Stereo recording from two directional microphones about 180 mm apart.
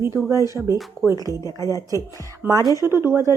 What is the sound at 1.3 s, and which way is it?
Speech, 20° left (ahead or behind).